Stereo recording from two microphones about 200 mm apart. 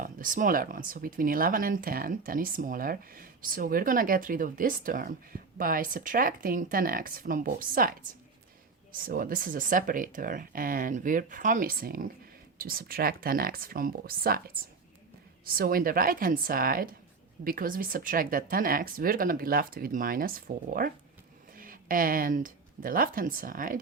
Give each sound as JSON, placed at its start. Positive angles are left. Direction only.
{"t": 0.0, "sound": "speech", "side_deg": -40}
{"t": 15.4, "sound": "speech", "side_deg": -45}